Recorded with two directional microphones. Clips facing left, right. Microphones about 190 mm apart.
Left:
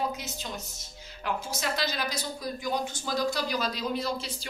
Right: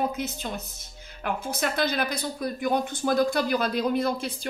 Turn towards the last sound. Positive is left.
turn(degrees=-55)  # may be behind; listen again after turning